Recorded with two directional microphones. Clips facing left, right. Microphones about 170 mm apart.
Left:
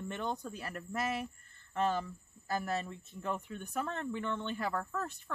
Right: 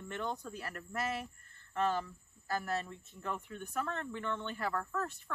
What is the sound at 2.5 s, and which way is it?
Speech, 20° left (ahead or behind).